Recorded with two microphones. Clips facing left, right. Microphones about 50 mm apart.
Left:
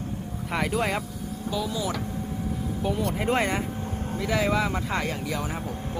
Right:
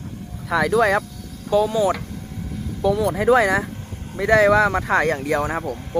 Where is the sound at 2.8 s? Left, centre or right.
Right.